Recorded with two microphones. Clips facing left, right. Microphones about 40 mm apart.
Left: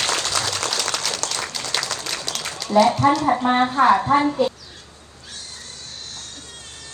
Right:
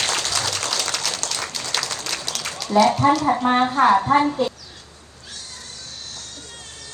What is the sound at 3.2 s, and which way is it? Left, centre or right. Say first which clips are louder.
Speech: even; left.